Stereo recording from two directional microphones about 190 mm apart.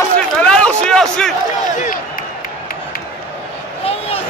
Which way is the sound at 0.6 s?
5° left (ahead or behind).